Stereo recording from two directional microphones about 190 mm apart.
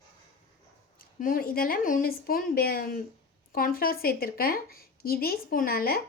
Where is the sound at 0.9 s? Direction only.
50° left (ahead or behind).